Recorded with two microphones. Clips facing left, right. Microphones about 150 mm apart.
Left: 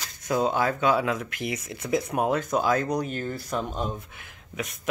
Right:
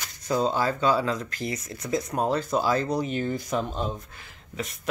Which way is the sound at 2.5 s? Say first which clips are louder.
Even; 5° right (ahead or behind).